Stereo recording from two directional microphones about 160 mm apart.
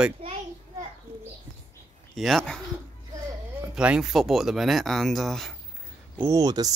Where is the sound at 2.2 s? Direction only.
Centre (ahead or behind).